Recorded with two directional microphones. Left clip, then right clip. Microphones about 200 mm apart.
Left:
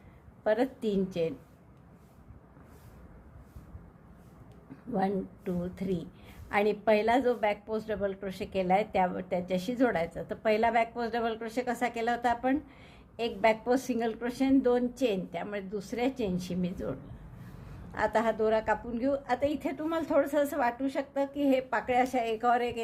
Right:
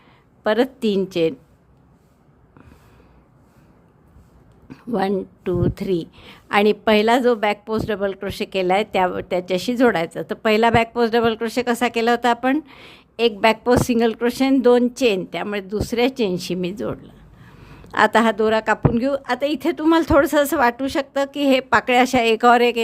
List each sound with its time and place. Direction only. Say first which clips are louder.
0.4 s a woman's voice: right 9 dB; 45° right (ahead or behind)
4.9 s a woman's voice: right 10 dB; 45° right (ahead or behind)